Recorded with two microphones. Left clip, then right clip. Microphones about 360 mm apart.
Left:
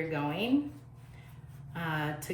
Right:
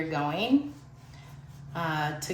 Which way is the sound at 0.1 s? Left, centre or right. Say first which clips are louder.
Right 4 dB; centre.